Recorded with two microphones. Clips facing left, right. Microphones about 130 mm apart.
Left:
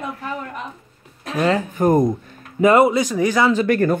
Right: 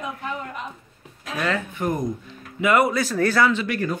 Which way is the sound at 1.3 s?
30° left (ahead or behind).